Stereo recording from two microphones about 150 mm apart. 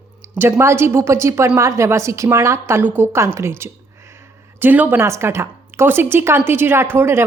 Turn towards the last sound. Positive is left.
turn(degrees=-15)  # may be behind; listen again after turning